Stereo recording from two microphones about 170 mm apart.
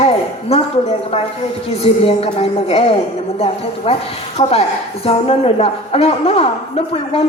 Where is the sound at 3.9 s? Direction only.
35° left (ahead or behind).